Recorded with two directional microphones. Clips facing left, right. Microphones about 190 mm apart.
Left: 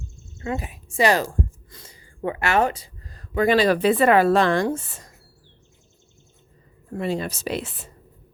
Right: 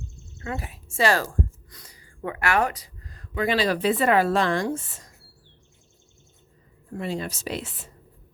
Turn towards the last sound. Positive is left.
turn(degrees=65)  # may be behind; listen again after turning